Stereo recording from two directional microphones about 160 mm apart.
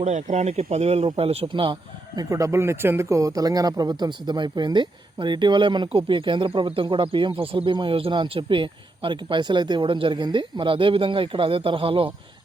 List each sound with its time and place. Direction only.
0.0 s speech: 45° right (ahead or behind)